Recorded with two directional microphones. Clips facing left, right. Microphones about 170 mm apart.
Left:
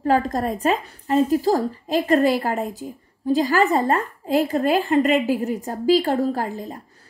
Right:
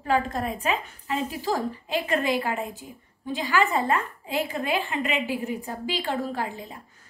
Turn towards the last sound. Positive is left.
turn(degrees=40)  # may be behind; listen again after turning